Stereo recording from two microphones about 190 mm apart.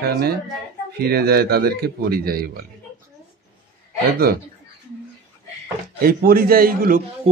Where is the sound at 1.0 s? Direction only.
55° right (ahead or behind).